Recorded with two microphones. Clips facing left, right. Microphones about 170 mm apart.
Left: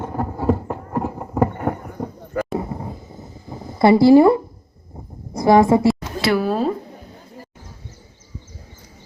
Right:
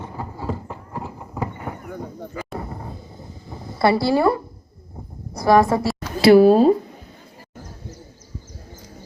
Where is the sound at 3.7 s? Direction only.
20° left (ahead or behind).